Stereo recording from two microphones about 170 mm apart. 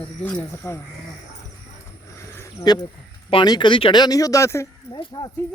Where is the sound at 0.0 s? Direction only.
10° left (ahead or behind).